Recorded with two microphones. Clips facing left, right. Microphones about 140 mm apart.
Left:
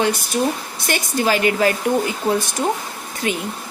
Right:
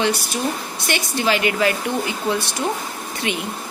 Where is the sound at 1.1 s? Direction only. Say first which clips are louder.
Left 3 dB; 40° left (ahead or behind).